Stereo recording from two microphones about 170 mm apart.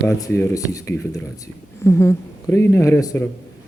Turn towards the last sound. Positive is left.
turn(degrees=15)  # may be behind; listen again after turning